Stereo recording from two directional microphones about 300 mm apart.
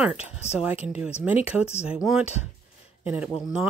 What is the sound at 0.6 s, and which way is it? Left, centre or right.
Speech, centre.